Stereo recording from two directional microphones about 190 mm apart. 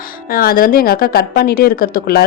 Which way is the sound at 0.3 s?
50° left (ahead or behind).